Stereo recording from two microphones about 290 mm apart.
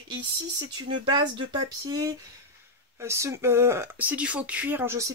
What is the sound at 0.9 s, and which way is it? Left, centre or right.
Speech, centre.